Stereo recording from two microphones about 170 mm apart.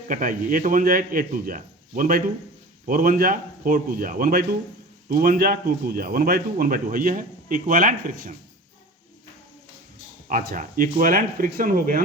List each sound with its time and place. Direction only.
0.1 s a man's voice: 50° right (ahead or behind)
10.2 s a man's voice: 55° right (ahead or behind)